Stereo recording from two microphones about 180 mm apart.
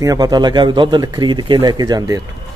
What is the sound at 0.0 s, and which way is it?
Speech, 20° right (ahead or behind).